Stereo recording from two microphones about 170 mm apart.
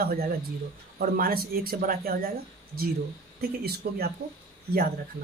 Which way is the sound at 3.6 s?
65° right (ahead or behind).